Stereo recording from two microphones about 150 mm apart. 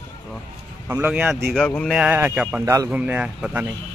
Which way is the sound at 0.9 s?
10° right (ahead or behind).